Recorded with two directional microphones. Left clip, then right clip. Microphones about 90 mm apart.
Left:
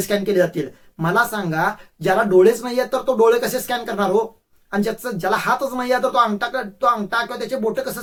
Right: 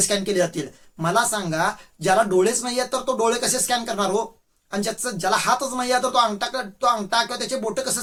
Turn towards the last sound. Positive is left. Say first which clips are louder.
# left 3 dB
turn(degrees=-15)  # may be behind; listen again after turning